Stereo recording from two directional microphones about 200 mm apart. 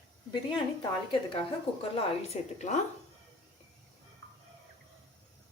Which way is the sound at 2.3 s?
35° left (ahead or behind).